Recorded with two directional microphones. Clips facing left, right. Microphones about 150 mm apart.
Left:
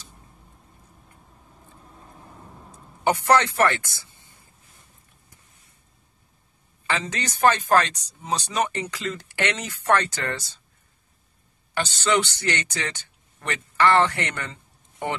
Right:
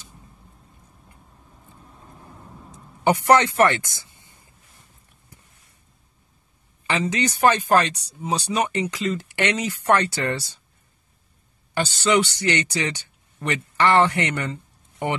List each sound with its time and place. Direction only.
3.0 s speech: 15° right (ahead or behind)
6.9 s speech: 15° right (ahead or behind)
11.7 s a man's voice: 10° right (ahead or behind)